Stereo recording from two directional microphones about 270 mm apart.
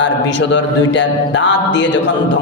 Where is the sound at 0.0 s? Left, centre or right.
Left.